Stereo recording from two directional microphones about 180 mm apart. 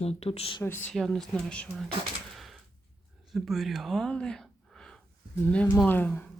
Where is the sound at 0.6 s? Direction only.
10° left (ahead or behind).